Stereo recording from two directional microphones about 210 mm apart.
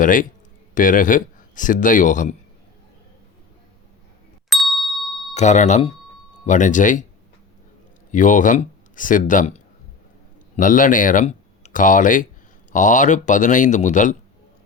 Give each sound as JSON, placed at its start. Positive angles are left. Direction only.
{"t": 0.0, "sound": "speech", "side_deg": 40}
{"t": 4.4, "sound": "ding", "side_deg": 0}
{"t": 5.3, "sound": "speech", "side_deg": 35}
{"t": 8.1, "sound": "speech", "side_deg": 35}
{"t": 10.6, "sound": "speech", "side_deg": 40}